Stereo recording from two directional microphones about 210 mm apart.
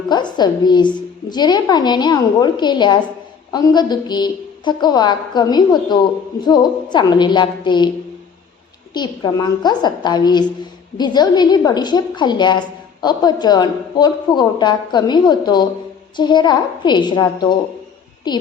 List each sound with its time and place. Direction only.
0.1 s a woman's voice: 20° left (ahead or behind)
8.9 s a woman's voice: 20° left (ahead or behind)